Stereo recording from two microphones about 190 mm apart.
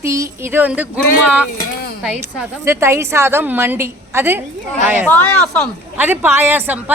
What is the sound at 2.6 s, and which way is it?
A woman's voice, 15° right (ahead or behind).